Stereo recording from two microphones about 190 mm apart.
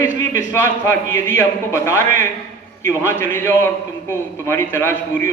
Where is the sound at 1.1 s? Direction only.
15° left (ahead or behind).